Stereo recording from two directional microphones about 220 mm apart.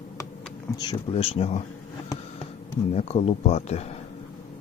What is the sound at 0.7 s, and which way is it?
Speech, 20° left (ahead or behind).